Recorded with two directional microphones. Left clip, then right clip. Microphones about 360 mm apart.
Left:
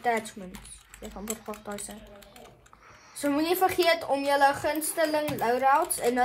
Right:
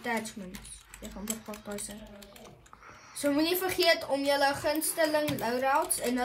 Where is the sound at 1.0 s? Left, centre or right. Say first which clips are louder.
Left 3 dB; left.